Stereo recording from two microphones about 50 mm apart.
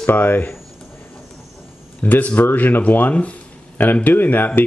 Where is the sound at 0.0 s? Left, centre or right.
Left.